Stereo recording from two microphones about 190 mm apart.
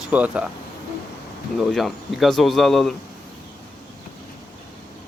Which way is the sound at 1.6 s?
Centre (ahead or behind).